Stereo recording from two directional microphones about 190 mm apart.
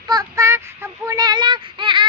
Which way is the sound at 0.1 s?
20° right (ahead or behind).